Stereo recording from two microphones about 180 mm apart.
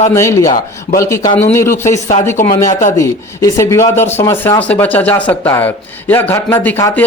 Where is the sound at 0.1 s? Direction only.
15° left (ahead or behind).